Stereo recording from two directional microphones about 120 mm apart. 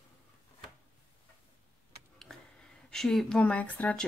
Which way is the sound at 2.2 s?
5° left (ahead or behind).